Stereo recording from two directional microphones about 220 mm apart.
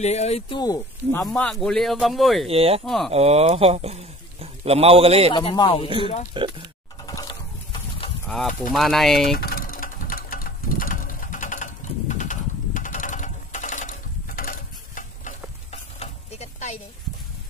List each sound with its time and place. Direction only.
0.0 s speech: 30° left (ahead or behind)
1.2 s speech: 5° left (ahead or behind)
2.4 s speech: 25° right (ahead or behind)
2.8 s speech: centre (ahead or behind)
3.1 s speech: 30° right (ahead or behind)
5.3 s speech: 20° left (ahead or behind)
6.4 s speech: 25° right (ahead or behind)
7.1 s a sound: 20° left (ahead or behind)
8.3 s speech: centre (ahead or behind)
9.4 s a sound: 40° left (ahead or behind)